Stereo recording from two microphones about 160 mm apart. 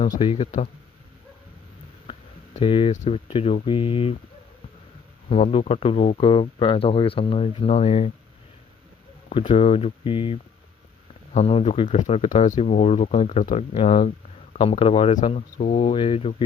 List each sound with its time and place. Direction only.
0.0 s speech: 30° left (ahead or behind)
2.0 s a sound: 35° left (ahead or behind)
2.9 s speech: 45° left (ahead or behind)
5.3 s speech: 40° left (ahead or behind)
9.3 s speech: 35° left (ahead or behind)